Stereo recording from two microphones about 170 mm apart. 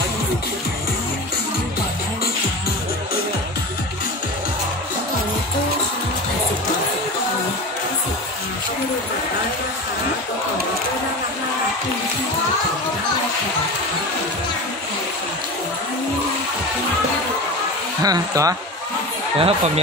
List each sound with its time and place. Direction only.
18.0 s speech: 20° right (ahead or behind)
19.3 s speech: 35° right (ahead or behind)